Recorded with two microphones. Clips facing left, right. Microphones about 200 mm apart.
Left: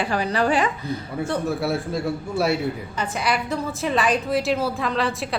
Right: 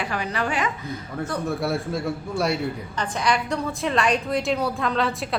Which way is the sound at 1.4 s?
Centre (ahead or behind).